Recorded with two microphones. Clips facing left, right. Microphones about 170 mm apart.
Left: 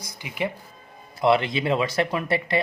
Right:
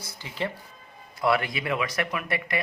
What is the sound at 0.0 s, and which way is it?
A man's voice, 15° left (ahead or behind).